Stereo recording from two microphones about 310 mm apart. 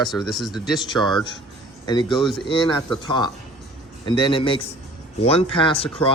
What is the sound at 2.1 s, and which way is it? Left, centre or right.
Speech, centre.